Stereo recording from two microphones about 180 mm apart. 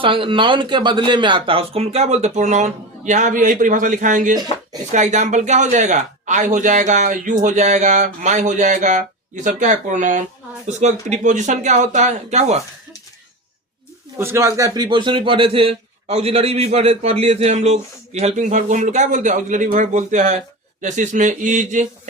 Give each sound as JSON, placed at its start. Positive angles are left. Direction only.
{"t": 0.0, "sound": "a man's voice", "side_deg": -30}
{"t": 14.2, "sound": "a man's voice", "side_deg": -15}